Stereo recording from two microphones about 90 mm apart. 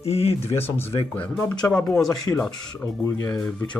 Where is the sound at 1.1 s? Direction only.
15° left (ahead or behind).